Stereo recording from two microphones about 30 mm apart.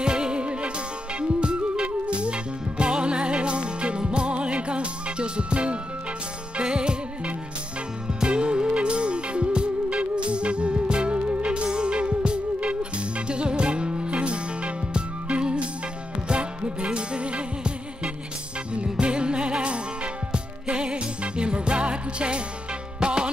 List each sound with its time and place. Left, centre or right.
0.0 s music: right
20.6 s music: right